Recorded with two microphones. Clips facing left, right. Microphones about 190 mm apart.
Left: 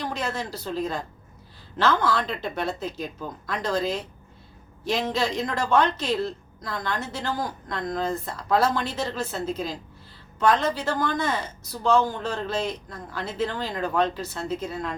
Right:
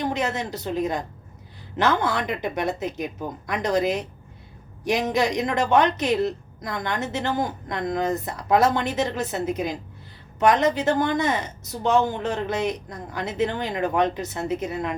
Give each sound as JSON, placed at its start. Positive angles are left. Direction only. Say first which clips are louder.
{"t": 0.0, "sound": "a woman's voice", "louder": "right 4 dB", "side_deg": -20}